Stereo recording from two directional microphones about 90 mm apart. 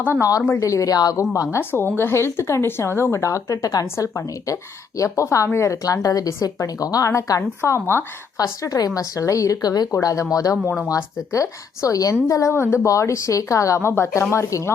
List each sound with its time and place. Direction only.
0.2 s speech: 40° left (ahead or behind)
1.5 s speech: 25° left (ahead or behind)
8.6 s speech: 40° left (ahead or behind)